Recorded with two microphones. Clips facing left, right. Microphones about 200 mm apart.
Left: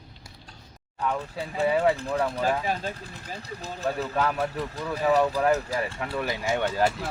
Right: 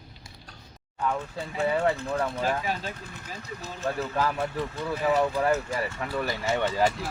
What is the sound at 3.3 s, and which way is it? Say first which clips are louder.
Speech: left 2 dB; 35° left (ahead or behind).